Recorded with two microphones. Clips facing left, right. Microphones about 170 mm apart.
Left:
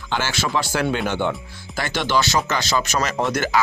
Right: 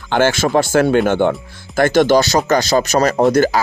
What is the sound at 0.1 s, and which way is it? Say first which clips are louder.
Speech: right 9 dB; 50° right (ahead or behind).